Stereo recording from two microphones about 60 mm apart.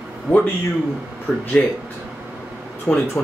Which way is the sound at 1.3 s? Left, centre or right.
Left.